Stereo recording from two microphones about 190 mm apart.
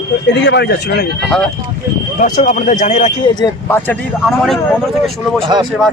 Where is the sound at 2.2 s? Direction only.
45° left (ahead or behind).